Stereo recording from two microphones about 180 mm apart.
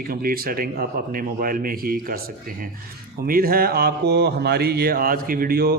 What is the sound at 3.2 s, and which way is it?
Mantra, 55° right (ahead or behind).